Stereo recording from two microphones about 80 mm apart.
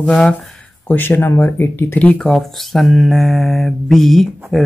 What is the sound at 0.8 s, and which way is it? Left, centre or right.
Speech, left.